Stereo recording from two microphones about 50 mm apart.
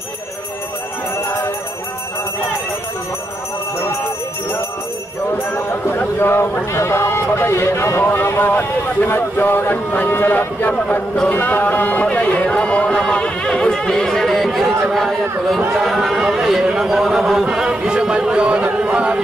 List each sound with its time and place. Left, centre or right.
5.5 s a sound: left
7.3 s speech: left
8.0 s speech: left; by 19.2 s right